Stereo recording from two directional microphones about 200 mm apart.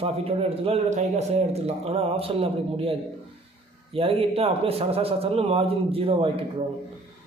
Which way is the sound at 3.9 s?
30° right (ahead or behind).